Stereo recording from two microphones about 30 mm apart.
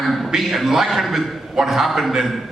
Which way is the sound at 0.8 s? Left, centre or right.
Centre.